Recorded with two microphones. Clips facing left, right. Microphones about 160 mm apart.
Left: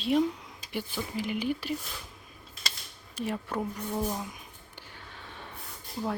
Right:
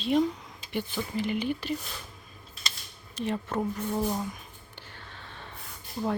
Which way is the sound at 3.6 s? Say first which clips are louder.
Right 3 dB; 5° right (ahead or behind).